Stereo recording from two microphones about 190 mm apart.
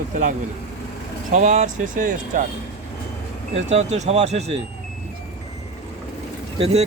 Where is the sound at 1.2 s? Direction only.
45° right (ahead or behind).